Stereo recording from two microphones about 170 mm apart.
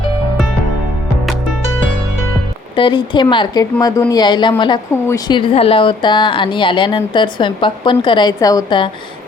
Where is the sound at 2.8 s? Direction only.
30° left (ahead or behind).